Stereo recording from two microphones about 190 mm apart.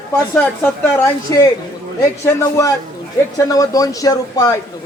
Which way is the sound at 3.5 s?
20° left (ahead or behind).